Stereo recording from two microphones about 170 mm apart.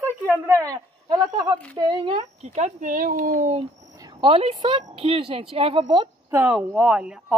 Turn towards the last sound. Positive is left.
turn(degrees=-5)  # may be behind; listen again after turning